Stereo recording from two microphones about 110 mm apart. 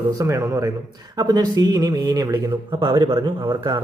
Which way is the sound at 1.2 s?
40° right (ahead or behind).